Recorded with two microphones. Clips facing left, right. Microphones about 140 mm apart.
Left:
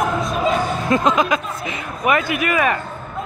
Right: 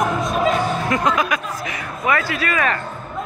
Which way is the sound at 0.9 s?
20° left (ahead or behind).